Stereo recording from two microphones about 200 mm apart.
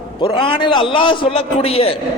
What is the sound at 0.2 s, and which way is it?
Speech, 25° left (ahead or behind).